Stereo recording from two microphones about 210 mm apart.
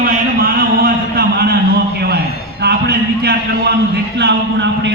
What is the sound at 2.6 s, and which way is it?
A man's voice, 50° right (ahead or behind).